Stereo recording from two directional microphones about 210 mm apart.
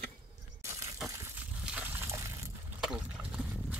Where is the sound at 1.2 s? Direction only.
5° right (ahead or behind).